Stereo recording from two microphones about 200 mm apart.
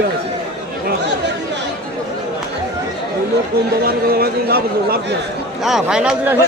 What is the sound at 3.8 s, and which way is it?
A man's voice, 50° right (ahead or behind).